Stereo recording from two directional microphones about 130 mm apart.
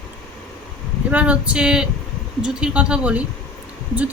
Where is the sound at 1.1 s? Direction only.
10° right (ahead or behind).